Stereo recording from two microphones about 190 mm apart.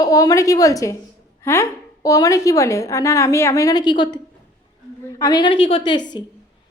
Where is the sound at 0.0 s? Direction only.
20° left (ahead or behind).